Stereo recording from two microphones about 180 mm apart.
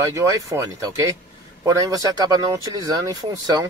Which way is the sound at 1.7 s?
20° right (ahead or behind).